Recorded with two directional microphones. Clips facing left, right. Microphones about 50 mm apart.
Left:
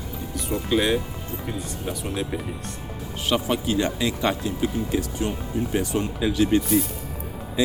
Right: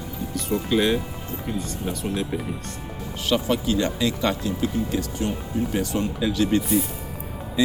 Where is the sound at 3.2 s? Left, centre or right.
Left.